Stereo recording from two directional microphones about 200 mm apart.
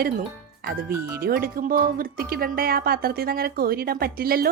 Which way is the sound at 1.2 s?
50° right (ahead or behind).